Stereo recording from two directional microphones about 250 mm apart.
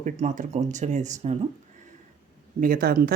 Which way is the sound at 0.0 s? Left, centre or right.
Right.